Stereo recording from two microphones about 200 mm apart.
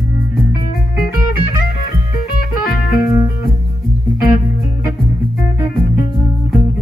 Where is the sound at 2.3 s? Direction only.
45° left (ahead or behind).